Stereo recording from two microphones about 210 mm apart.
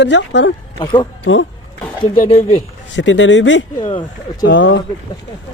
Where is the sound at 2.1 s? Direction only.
40° left (ahead or behind).